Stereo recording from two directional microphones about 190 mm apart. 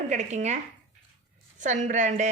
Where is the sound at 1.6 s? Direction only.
40° right (ahead or behind).